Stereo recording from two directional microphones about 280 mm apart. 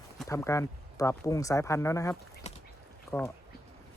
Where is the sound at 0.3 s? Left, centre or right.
Centre.